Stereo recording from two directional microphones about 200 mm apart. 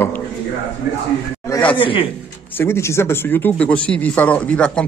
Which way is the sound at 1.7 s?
25° left (ahead or behind).